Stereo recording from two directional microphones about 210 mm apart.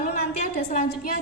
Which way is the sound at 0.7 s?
40° left (ahead or behind).